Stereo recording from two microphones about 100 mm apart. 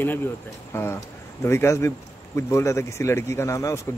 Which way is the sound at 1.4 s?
25° left (ahead or behind).